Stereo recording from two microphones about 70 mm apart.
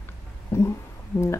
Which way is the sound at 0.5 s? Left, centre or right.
Left.